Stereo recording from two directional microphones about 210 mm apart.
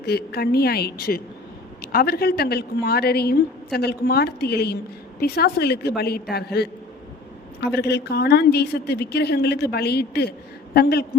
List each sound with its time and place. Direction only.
0.0 s a woman's voice: 50° left (ahead or behind)